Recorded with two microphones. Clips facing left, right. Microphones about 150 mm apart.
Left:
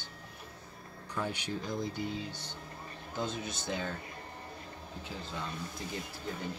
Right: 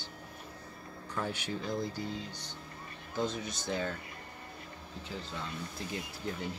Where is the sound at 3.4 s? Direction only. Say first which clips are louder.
Right 1 dB; centre (ahead or behind).